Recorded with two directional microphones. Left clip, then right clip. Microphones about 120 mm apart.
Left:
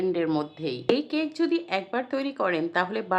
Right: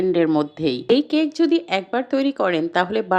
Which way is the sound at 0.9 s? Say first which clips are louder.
Right 8 dB; 40° right (ahead or behind).